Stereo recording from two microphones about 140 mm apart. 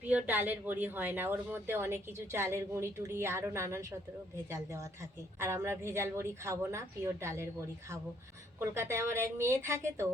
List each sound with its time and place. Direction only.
0.0 s a woman's voice: 10° right (ahead or behind)
8.5 s a woman's voice: 20° right (ahead or behind)